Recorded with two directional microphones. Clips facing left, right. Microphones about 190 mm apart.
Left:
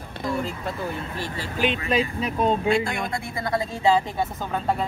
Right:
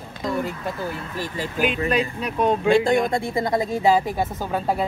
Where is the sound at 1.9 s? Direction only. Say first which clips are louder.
Right 1 dB; centre (ahead or behind).